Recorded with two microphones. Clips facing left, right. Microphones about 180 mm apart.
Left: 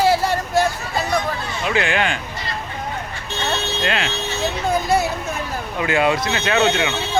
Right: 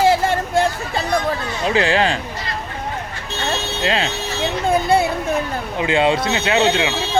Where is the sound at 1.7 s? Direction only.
30° right (ahead or behind).